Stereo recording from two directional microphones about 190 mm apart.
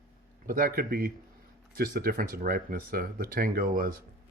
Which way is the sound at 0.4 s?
45° right (ahead or behind).